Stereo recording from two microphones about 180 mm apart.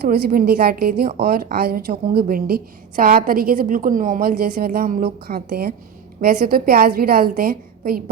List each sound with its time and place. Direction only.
0.0 s a woman's voice: 55° right (ahead or behind)